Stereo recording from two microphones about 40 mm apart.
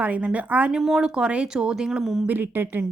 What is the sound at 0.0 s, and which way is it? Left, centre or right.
Speech, right.